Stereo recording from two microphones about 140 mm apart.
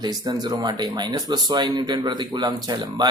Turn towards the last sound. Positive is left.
turn(degrees=-30)  # may be behind; listen again after turning